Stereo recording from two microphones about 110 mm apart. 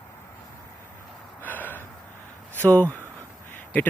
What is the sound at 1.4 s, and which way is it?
Gasp, 15° left (ahead or behind).